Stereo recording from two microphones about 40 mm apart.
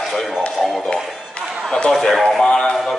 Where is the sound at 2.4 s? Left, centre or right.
Centre.